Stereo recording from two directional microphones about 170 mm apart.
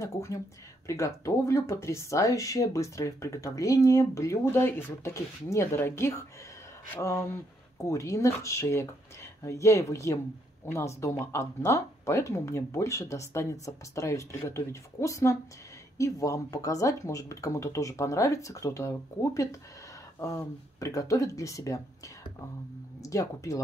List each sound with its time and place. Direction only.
0.0 s speech: 15° left (ahead or behind)